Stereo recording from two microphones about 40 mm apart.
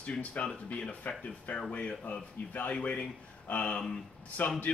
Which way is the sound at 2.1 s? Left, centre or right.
Left.